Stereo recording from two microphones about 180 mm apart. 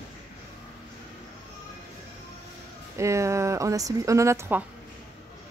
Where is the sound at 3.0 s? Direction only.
15° right (ahead or behind).